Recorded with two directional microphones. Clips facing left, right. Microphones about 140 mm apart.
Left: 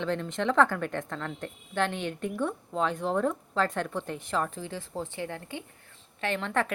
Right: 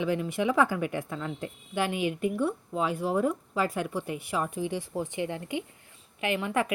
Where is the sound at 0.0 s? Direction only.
10° right (ahead or behind).